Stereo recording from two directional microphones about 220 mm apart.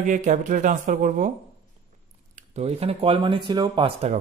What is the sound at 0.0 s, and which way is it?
A man's voice, 35° right (ahead or behind).